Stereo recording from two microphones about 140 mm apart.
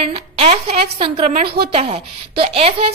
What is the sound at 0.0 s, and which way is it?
A woman's voice, 45° right (ahead or behind).